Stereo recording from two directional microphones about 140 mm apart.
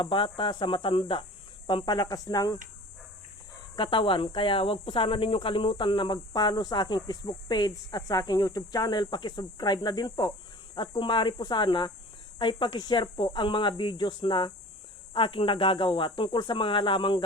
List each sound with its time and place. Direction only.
0.0 s a woman's voice: 35° left (ahead or behind)
3.8 s a woman's voice: 35° left (ahead or behind)